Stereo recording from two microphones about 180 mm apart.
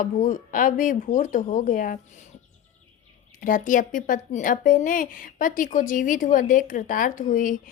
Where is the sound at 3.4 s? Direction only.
45° left (ahead or behind).